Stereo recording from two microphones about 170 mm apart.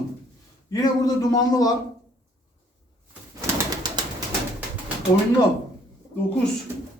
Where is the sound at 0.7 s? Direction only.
20° left (ahead or behind).